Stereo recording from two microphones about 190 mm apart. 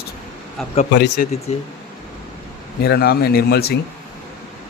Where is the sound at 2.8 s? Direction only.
55° left (ahead or behind).